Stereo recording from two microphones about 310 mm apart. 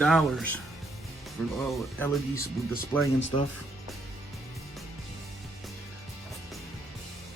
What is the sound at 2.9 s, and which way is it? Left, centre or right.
Speech, centre.